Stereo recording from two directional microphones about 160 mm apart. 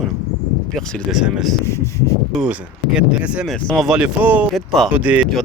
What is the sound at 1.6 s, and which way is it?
Speech, 15° left (ahead or behind).